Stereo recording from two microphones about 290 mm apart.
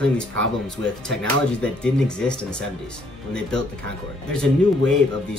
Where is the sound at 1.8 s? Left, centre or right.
Centre.